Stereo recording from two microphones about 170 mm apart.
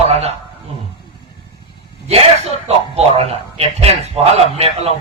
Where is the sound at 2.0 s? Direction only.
40° right (ahead or behind).